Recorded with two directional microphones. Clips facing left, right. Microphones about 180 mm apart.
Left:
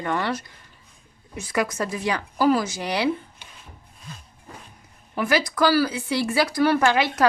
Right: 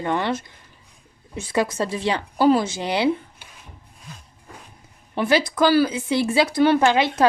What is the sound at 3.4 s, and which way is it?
Rub, 10° right (ahead or behind).